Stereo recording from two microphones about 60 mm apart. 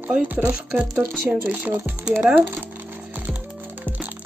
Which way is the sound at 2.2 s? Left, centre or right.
Centre.